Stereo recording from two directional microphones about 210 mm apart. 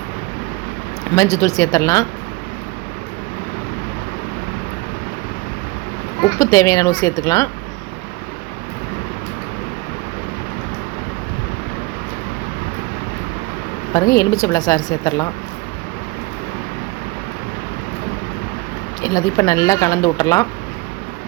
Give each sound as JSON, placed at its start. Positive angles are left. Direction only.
{"t": 1.1, "sound": "speech", "side_deg": 15}
{"t": 6.2, "sound": "speech", "side_deg": 15}
{"t": 13.9, "sound": "speech", "side_deg": 15}
{"t": 19.0, "sound": "speech", "side_deg": 15}